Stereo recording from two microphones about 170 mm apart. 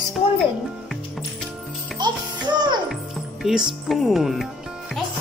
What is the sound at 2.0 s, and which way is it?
Music, 25° right (ahead or behind).